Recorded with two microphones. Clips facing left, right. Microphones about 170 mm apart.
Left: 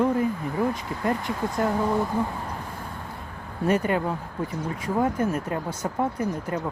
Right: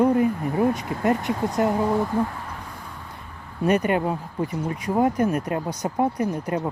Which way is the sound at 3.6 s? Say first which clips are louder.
Right 2 dB; 15° right (ahead or behind).